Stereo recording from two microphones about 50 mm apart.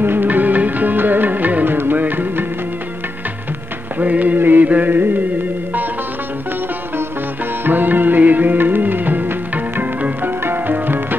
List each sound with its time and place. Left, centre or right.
0.0 s music: right
4.0 s mantra: right
7.6 s music: right